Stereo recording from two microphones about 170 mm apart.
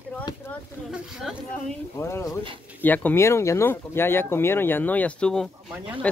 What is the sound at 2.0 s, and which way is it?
Speech, 15° left (ahead or behind).